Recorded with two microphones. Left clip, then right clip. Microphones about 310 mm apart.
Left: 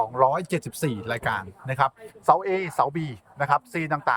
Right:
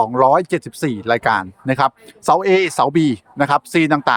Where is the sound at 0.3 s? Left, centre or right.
Centre.